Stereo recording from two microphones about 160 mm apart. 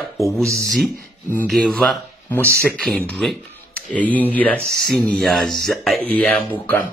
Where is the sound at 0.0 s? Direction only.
Centre (ahead or behind).